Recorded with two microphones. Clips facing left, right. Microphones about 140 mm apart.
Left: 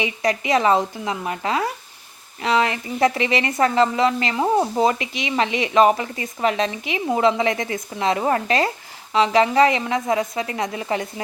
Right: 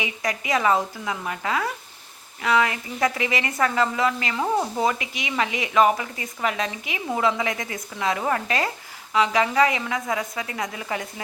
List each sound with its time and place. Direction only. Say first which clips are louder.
0.0 s a woman's voice: left 6 dB; 25° left (ahead or behind)